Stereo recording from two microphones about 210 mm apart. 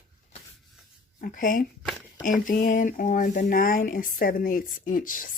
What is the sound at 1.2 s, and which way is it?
Speech, 40° left (ahead or behind).